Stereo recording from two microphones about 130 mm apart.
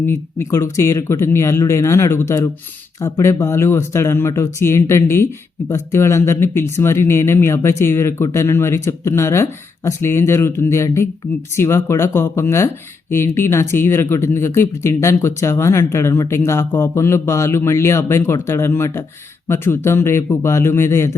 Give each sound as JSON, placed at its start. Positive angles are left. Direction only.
{"t": 0.0, "sound": "speech", "side_deg": 20}